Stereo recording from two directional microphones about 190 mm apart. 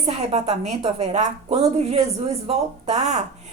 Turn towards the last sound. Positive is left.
turn(degrees=-35)  # may be behind; listen again after turning